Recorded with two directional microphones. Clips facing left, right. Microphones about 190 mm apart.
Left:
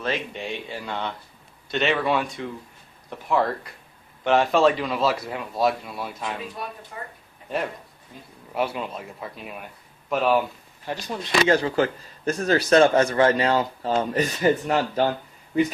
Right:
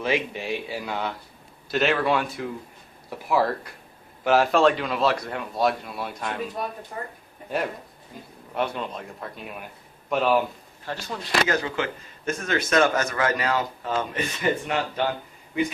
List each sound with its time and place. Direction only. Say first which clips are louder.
0.0 s a man's voice: right 2 dB; 10° right (ahead or behind)
6.6 s speech: right 3 dB; 50° right (ahead or behind)
8.5 s a man's voice: left 1 dB; 5° left (ahead or behind)
10.9 s speech: left 2 dB; 15° left (ahead or behind)
11.4 s speech: left 6 dB; 30° left (ahead or behind)